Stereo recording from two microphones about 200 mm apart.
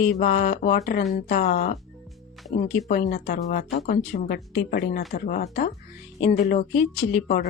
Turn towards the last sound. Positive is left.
turn(degrees=45)  # may be behind; listen again after turning